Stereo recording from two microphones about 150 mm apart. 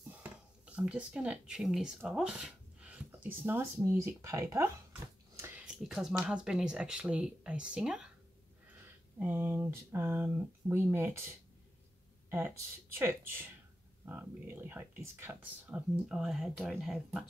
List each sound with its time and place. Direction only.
0.1 s speech: 10° right (ahead or behind)
5.6 s speech: 5° right (ahead or behind)
9.2 s speech: 15° right (ahead or behind)
12.3 s speech: 15° right (ahead or behind)